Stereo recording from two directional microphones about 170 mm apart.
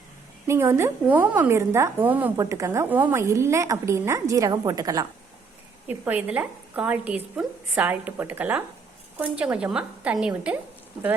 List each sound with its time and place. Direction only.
0.4 s a woman's voice: 15° right (ahead or behind)
5.9 s a woman's voice: 10° right (ahead or behind)